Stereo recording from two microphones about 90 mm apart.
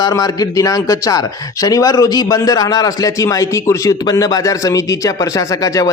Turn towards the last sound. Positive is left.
turn(degrees=40)  # may be behind; listen again after turning